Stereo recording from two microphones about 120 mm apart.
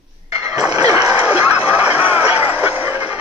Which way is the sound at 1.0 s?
15° right (ahead or behind).